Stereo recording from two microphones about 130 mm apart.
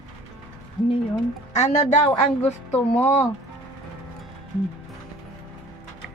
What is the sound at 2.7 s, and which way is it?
Speech, 15° left (ahead or behind).